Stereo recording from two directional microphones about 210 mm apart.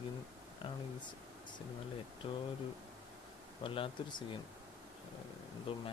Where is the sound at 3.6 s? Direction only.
25° left (ahead or behind).